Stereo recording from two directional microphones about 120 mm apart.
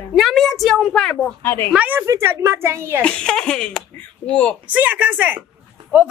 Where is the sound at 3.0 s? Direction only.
10° left (ahead or behind).